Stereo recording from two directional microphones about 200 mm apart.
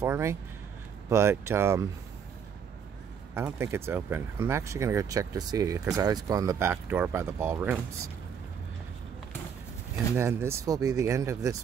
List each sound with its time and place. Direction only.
0.0 s speech: 15° right (ahead or behind)
3.3 s speech: 15° right (ahead or behind)
10.1 s speech: 15° right (ahead or behind)